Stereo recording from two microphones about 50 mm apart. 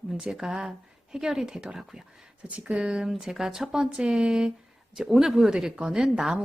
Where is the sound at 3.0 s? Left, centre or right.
Centre.